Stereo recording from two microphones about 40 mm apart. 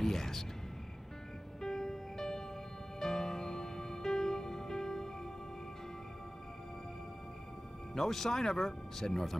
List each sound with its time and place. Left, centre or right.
0.0 s music: centre
1.6 s music: centre
7.9 s speech: centre